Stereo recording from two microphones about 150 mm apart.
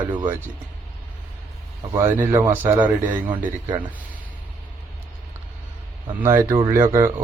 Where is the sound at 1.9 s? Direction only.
15° right (ahead or behind).